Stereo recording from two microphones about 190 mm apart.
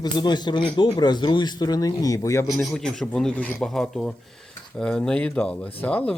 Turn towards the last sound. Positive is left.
turn(degrees=10)  # may be behind; listen again after turning